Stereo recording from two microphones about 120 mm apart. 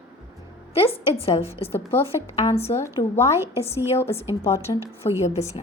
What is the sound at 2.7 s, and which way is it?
Speech, 20° left (ahead or behind).